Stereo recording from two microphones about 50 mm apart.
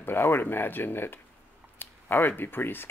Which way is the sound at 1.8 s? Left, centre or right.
Left.